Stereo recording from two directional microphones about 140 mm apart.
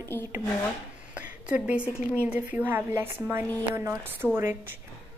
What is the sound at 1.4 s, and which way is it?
A woman's voice, 10° right (ahead or behind).